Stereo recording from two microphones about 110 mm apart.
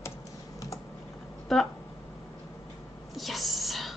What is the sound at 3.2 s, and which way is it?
Whispering, centre (ahead or behind).